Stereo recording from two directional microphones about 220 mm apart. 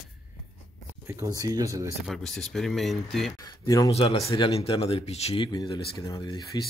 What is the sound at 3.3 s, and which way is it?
Speech, 15° left (ahead or behind).